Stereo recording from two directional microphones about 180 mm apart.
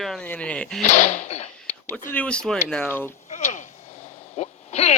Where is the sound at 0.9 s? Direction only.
40° left (ahead or behind).